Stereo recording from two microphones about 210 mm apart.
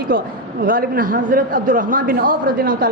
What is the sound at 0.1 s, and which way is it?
A woman's voice, 45° right (ahead or behind).